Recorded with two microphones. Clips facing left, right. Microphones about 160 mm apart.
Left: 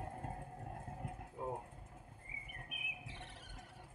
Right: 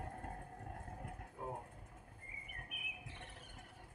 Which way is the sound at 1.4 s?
20° left (ahead or behind).